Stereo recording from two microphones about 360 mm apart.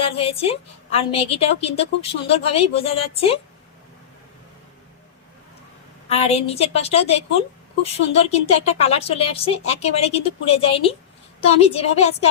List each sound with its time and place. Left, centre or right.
0.0 s a woman's voice: centre
6.1 s a woman's voice: centre